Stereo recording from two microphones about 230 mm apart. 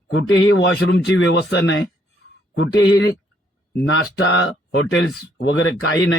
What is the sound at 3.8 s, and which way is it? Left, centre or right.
A man's voice, left.